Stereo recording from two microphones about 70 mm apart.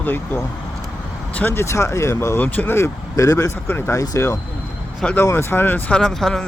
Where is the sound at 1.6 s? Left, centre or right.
Left.